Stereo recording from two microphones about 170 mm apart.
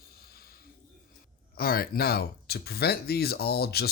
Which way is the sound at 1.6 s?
60° left (ahead or behind).